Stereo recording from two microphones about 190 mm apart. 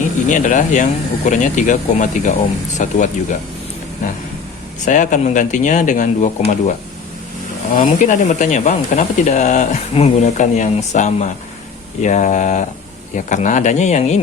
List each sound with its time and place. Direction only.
0.0 s speech: 40° left (ahead or behind)
4.9 s speech: 40° left (ahead or behind)
7.8 s speech: 45° left (ahead or behind)